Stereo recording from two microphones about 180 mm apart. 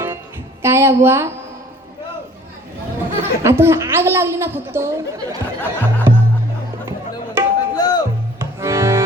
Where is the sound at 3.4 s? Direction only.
15° right (ahead or behind).